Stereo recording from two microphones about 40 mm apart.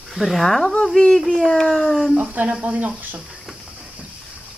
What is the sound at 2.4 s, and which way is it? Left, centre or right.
Speech, right.